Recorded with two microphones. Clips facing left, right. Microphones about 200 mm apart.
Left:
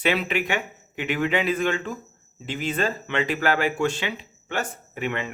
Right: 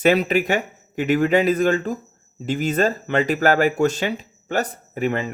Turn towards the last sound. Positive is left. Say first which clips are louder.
# right 6 dB
turn(degrees=-40)  # may be behind; listen again after turning